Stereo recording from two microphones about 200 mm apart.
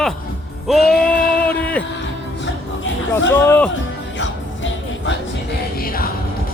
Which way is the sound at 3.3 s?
10° left (ahead or behind).